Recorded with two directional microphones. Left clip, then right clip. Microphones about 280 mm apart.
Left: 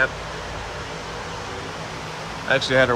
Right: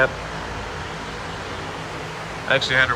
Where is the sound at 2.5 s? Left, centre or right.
Centre.